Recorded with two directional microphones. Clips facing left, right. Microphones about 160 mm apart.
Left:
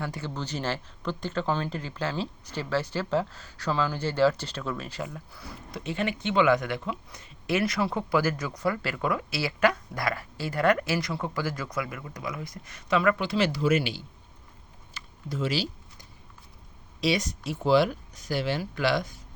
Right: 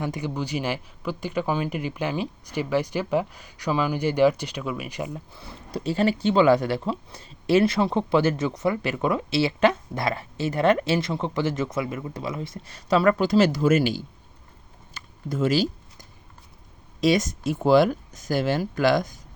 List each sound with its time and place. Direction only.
0.0 s speech: 15° right (ahead or behind); by 14.0 s 45° right (ahead or behind)
14.9 s a sound: 50° right (ahead or behind)
17.0 s speech: 45° right (ahead or behind)